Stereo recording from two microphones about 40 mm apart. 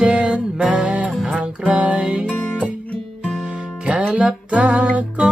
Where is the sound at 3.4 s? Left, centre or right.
Right.